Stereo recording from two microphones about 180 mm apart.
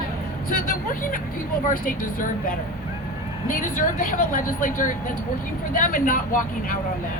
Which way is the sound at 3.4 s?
50° left (ahead or behind).